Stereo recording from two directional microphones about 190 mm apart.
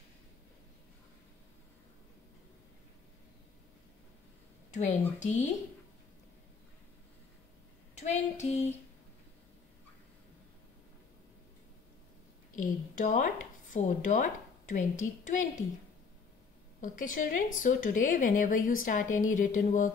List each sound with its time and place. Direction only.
4.6 s speech: 40° left (ahead or behind)
7.9 s a sound: 35° left (ahead or behind)
12.5 s speech: 40° left (ahead or behind)
16.8 s speech: 45° left (ahead or behind)